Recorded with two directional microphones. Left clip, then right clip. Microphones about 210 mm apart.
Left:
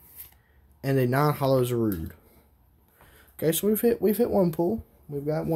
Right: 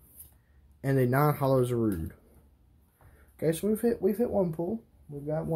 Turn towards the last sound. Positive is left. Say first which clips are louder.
# left 5 dB
turn(degrees=50)  # may be behind; listen again after turning